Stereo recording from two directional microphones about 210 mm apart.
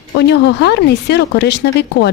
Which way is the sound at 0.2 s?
55° left (ahead or behind).